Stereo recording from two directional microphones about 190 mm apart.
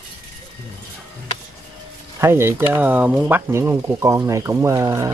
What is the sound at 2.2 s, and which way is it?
Speech, 15° right (ahead or behind).